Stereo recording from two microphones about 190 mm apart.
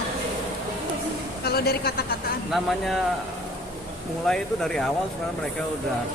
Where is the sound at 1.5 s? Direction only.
55° left (ahead or behind).